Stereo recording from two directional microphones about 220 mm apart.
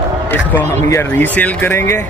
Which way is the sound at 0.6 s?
10° left (ahead or behind).